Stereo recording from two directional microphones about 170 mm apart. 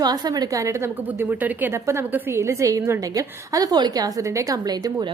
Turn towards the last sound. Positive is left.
turn(degrees=-20)  # may be behind; listen again after turning